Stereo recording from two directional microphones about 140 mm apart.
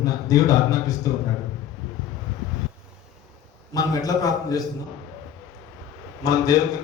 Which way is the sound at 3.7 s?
25° left (ahead or behind).